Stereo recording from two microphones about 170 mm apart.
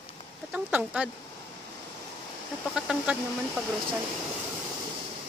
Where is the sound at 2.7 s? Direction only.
5° right (ahead or behind).